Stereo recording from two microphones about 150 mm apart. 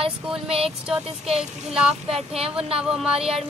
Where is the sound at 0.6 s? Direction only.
5° right (ahead or behind).